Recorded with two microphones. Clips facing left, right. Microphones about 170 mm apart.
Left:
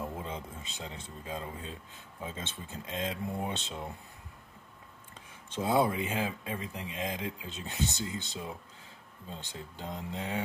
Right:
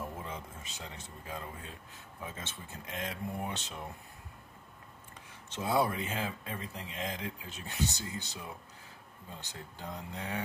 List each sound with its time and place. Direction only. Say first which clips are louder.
0.0 s speech: left 3 dB; 20° left (ahead or behind)
5.6 s speech: left 3 dB; 15° left (ahead or behind)